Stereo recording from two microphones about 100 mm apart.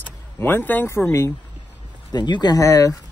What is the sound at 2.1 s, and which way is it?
Speech, 45° left (ahead or behind).